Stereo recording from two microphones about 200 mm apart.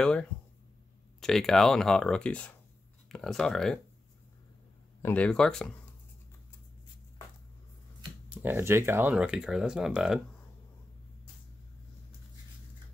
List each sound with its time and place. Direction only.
0.0 s speech: 5° left (ahead or behind)
5.0 s speech: 5° left (ahead or behind)
8.3 s speech: 10° right (ahead or behind)